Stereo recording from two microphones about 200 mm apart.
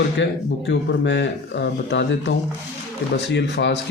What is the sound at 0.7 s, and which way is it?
Speech, 65° left (ahead or behind).